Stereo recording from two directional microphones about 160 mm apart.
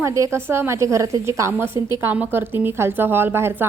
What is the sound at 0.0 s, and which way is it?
A woman's voice, 20° right (ahead or behind).